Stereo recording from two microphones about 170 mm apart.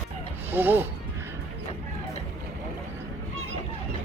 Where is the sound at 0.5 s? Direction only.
10° right (ahead or behind).